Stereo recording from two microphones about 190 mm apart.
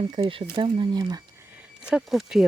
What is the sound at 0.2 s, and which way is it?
Speech, 25° right (ahead or behind).